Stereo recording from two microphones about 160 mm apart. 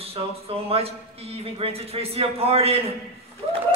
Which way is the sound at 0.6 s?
40° right (ahead or behind).